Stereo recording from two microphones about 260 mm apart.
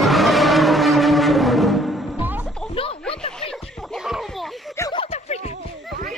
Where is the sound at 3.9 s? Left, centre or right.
Centre.